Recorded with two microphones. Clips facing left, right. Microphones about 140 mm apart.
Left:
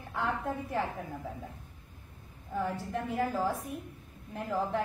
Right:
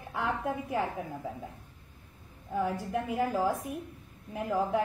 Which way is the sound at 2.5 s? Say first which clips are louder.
Right 3 dB; 10° right (ahead or behind).